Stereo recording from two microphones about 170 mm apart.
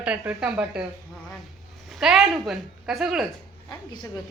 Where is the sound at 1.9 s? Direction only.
Centre (ahead or behind).